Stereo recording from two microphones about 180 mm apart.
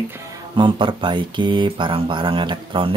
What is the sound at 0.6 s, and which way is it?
Speech, 25° right (ahead or behind).